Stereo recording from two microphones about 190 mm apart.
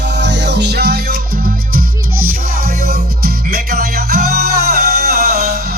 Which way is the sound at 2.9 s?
55° right (ahead or behind).